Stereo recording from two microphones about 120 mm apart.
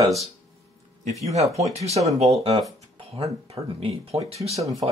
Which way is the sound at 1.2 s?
65° right (ahead or behind).